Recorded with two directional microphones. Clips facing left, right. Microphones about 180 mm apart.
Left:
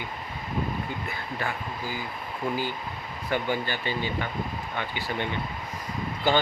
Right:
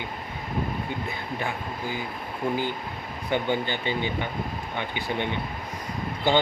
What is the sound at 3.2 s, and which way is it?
Speech, 20° right (ahead or behind).